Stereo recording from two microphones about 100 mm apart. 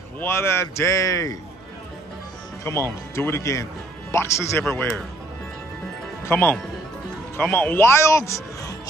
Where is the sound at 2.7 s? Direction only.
25° left (ahead or behind).